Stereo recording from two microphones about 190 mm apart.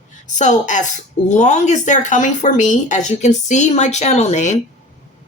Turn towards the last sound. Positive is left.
turn(degrees=40)  # may be behind; listen again after turning